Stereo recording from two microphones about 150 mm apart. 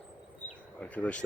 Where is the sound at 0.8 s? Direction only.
10° left (ahead or behind).